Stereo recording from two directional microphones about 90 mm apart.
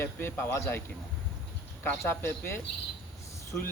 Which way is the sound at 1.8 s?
25° left (ahead or behind).